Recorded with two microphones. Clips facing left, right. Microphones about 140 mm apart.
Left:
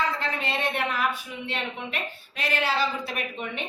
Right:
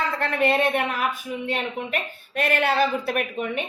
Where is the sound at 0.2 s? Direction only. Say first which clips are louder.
Right 8 dB; 55° right (ahead or behind).